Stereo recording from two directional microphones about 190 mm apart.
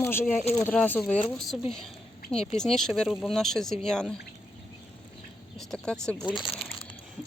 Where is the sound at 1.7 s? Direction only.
5° left (ahead or behind).